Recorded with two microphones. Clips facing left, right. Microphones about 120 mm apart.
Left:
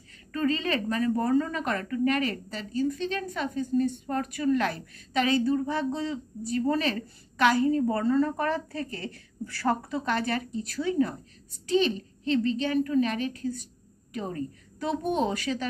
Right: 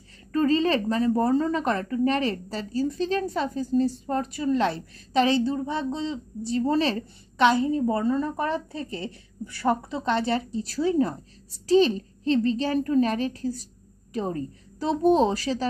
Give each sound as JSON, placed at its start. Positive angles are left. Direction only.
{"t": 0.3, "sound": "a woman's voice", "side_deg": -35}